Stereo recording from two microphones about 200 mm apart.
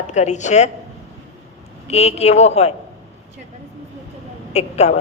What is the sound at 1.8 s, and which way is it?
Speech, 30° left (ahead or behind).